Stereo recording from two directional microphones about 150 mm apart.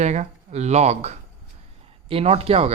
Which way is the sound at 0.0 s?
50° right (ahead or behind).